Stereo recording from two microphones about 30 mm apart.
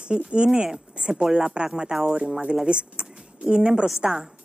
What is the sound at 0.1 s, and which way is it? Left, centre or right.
Speech, right.